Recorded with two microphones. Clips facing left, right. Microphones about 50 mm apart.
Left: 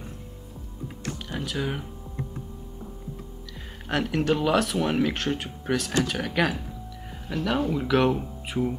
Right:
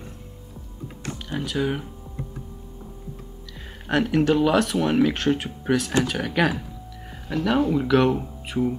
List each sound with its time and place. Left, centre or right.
1.3 s speech: centre
3.9 s speech: centre